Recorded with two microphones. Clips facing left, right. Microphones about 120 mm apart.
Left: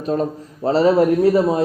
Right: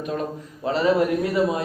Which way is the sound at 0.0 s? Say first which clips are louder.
Left 6 dB; 35° left (ahead or behind).